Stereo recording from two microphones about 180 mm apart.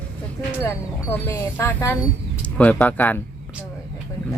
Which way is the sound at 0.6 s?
15° left (ahead or behind).